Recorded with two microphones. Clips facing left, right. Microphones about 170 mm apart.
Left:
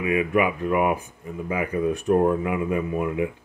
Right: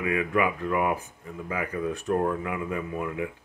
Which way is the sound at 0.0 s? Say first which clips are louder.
Left 4 dB; 15° left (ahead or behind).